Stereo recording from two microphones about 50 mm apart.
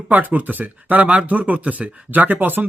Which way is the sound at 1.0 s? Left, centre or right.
Right.